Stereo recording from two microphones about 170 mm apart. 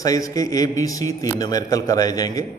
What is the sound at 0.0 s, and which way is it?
A man's voice, 20° left (ahead or behind).